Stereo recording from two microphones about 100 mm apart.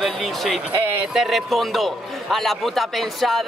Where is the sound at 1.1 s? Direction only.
5° right (ahead or behind).